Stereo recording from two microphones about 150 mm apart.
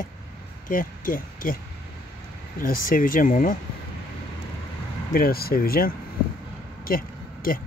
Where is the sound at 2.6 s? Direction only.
65° left (ahead or behind).